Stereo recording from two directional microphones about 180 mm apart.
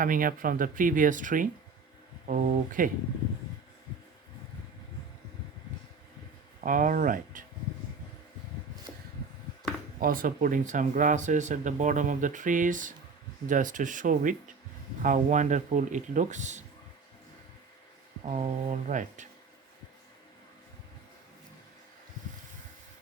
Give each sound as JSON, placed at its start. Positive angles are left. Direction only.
{"t": 0.0, "sound": "speech", "side_deg": -50}
{"t": 6.6, "sound": "speech", "side_deg": -50}
{"t": 10.0, "sound": "speech", "side_deg": -50}
{"t": 18.3, "sound": "speech", "side_deg": -40}